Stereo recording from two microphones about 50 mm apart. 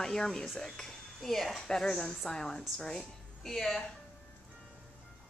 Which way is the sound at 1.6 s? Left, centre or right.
Centre.